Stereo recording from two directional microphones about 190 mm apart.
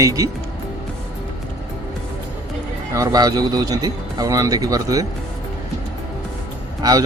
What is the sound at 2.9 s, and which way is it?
Speech, 20° right (ahead or behind).